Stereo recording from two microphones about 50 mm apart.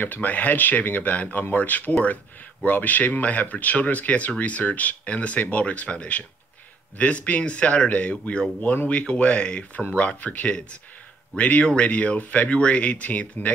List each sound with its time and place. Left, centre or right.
0.0 s speech: left